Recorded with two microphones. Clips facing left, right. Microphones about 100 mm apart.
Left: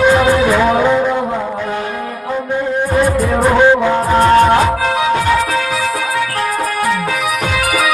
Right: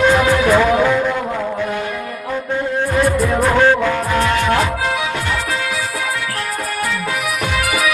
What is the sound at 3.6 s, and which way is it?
Music, 15° left (ahead or behind).